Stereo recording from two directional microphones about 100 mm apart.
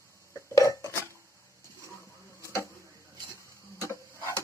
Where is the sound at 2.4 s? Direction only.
30° left (ahead or behind).